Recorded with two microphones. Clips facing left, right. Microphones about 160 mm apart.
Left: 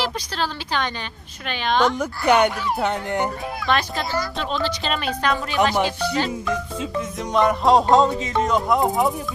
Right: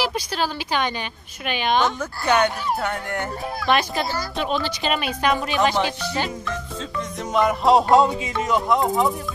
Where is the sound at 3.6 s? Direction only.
10° right (ahead or behind).